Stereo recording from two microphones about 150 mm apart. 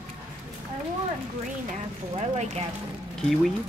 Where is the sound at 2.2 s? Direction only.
45° right (ahead or behind).